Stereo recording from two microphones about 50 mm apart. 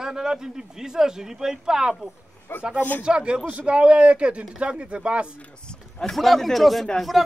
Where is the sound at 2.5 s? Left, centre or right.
Left.